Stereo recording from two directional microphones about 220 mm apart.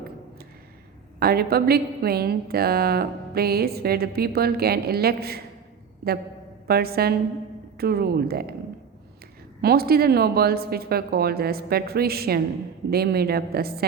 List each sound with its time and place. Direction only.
1.2 s a woman's voice: 45° right (ahead or behind)
6.7 s a woman's voice: 45° right (ahead or behind)
9.6 s a woman's voice: 45° right (ahead or behind)